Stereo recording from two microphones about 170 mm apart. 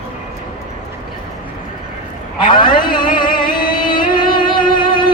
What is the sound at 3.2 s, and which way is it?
Music, 30° left (ahead or behind).